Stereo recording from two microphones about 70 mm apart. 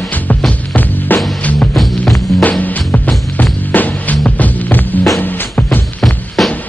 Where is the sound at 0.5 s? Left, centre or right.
Left.